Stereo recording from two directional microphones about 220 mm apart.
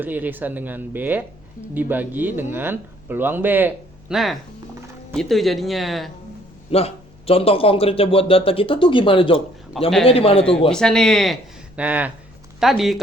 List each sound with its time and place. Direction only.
0.0 s speech: 10° right (ahead or behind)
6.7 s a man's voice: 25° left (ahead or behind)
9.7 s speech: centre (ahead or behind)
10.1 s a man's voice: 25° left (ahead or behind)
10.7 s speech: 5° left (ahead or behind)